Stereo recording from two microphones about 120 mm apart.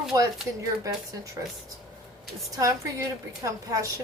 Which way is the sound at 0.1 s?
30° right (ahead or behind).